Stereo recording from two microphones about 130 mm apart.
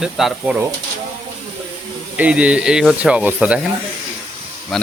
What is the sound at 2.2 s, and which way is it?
Speech, 10° right (ahead or behind).